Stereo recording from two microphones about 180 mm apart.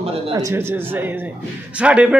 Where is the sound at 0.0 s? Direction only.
20° right (ahead or behind).